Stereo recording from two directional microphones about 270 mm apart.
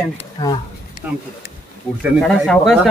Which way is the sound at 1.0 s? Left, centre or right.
Centre.